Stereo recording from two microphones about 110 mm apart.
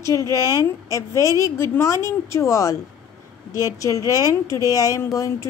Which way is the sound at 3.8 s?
30° left (ahead or behind).